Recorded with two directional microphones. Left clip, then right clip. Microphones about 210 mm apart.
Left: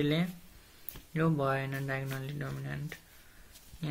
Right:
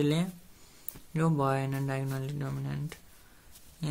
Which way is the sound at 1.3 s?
55° right (ahead or behind).